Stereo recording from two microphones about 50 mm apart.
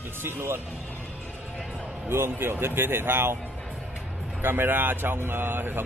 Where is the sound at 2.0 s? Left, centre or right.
Right.